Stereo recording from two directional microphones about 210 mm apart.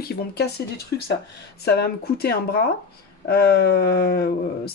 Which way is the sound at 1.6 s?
50° left (ahead or behind).